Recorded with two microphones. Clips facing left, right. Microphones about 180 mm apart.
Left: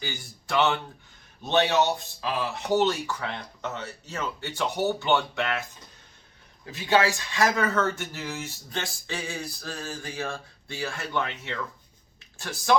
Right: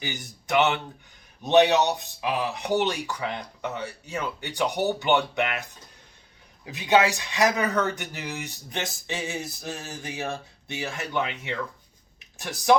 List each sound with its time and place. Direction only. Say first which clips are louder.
0.0 s speech: right 2 dB; 20° right (ahead or behind)
6.7 s speech: right 2 dB; 20° right (ahead or behind)